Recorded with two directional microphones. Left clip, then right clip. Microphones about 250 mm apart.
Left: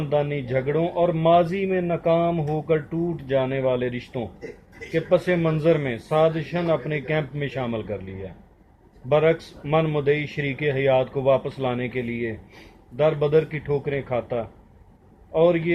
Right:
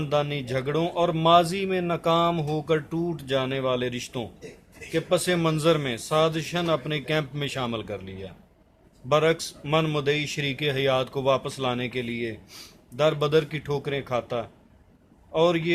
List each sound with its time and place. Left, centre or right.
0.0 s speech: right